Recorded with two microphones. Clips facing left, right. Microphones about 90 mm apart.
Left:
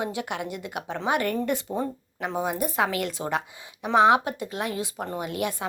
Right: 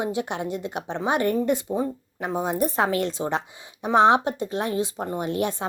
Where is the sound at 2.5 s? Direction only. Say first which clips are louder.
Right 3 dB; 35° right (ahead or behind).